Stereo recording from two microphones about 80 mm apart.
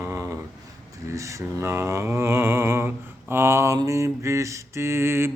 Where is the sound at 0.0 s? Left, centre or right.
Right.